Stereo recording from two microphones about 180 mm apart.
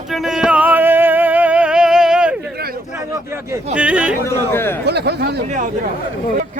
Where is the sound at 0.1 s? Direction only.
Centre (ahead or behind).